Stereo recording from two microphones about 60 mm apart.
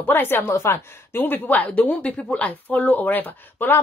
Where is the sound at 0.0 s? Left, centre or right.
Left.